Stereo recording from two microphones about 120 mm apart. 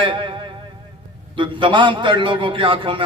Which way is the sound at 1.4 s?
40° right (ahead or behind).